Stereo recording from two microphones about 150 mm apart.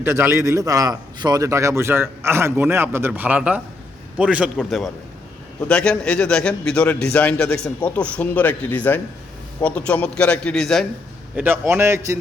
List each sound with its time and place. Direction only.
0.0 s a man's voice: 15° right (ahead or behind); by 10.8 s centre (ahead or behind)
11.3 s a man's voice: 15° right (ahead or behind)